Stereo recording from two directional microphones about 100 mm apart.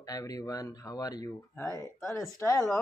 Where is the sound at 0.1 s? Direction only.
40° left (ahead or behind).